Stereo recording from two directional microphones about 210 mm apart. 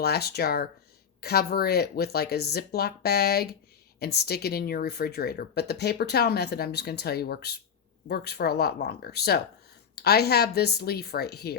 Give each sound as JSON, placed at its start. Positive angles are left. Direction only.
{"t": 0.0, "sound": "speech", "side_deg": 50}